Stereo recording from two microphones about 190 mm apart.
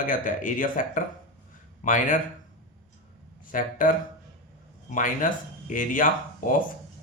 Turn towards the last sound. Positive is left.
turn(degrees=45)  # may be behind; listen again after turning